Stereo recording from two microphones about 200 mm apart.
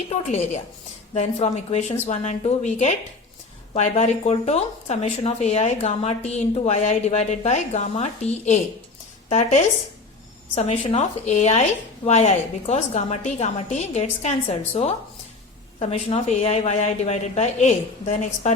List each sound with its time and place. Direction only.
0.1 s speech: 35° left (ahead or behind)